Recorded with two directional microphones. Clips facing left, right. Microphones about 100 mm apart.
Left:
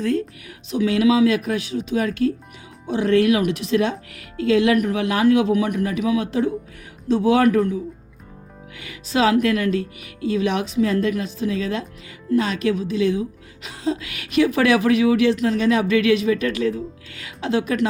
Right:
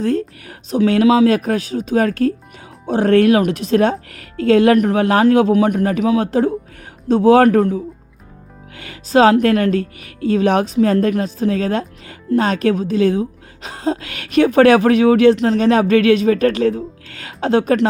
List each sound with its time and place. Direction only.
0.0 s speech: 35° right (ahead or behind)